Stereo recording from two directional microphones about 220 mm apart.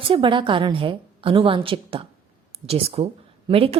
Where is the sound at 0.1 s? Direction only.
25° right (ahead or behind).